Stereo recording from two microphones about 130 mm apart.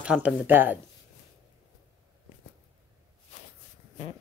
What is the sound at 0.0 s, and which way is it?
Speech, 10° right (ahead or behind).